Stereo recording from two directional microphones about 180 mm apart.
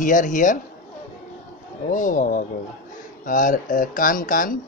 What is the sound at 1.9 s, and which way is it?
Speech, 45° left (ahead or behind).